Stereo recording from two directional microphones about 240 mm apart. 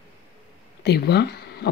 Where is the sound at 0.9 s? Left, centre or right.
Left.